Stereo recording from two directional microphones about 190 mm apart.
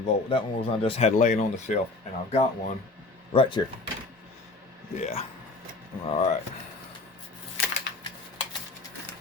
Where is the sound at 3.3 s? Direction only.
25° left (ahead or behind).